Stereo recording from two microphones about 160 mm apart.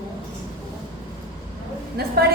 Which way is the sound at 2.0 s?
80° right.